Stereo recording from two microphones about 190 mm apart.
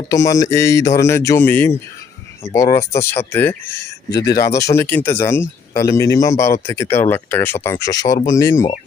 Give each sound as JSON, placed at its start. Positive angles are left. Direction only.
{"t": 0.1, "sound": "speech", "side_deg": 15}